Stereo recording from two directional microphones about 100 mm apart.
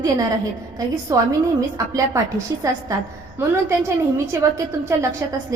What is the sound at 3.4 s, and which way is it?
A woman's voice, 25° right (ahead or behind).